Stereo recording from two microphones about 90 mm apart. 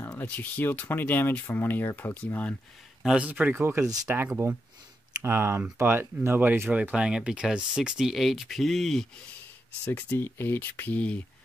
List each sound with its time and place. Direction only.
0.0 s speech: 20° left (ahead or behind)
3.0 s speech: 5° right (ahead or behind)
3.3 s speech: 20° right (ahead or behind)
3.8 s speech: 40° right (ahead or behind)
4.1 s speech: 25° right (ahead or behind)
6.7 s speech: 15° right (ahead or behind); by 9.0 s centre (ahead or behind)
9.8 s speech: 25° left (ahead or behind)